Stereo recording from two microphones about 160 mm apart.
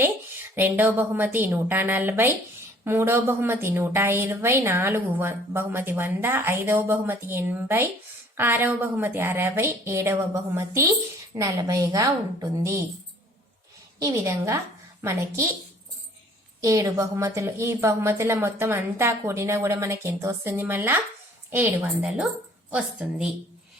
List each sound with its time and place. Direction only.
0.5 s a woman's voice: 10° right (ahead or behind)
14.0 s a woman's voice: 15° right (ahead or behind)
16.6 s a woman's voice: 20° right (ahead or behind)